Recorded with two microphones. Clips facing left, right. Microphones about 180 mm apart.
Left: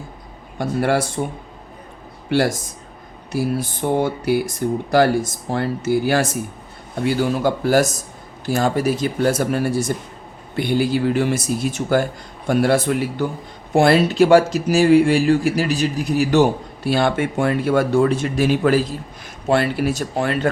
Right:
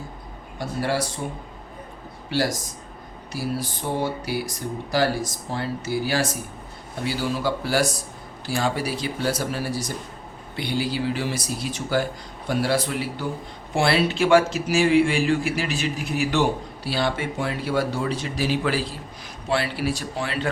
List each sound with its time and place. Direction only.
0.6 s speech: 55° left (ahead or behind)
3.3 s speech: 50° left (ahead or behind)